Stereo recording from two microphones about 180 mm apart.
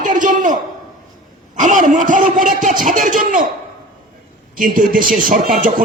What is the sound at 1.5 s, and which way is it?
Speech, 45° right (ahead or behind).